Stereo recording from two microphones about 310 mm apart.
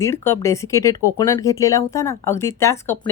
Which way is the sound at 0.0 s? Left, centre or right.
Centre.